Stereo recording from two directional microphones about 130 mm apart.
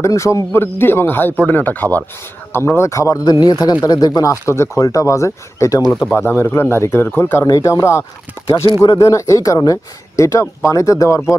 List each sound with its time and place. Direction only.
0.0 s speech: 25° left (ahead or behind)